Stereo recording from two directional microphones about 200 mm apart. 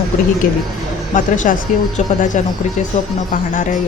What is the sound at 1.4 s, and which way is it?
Speech, 40° left (ahead or behind).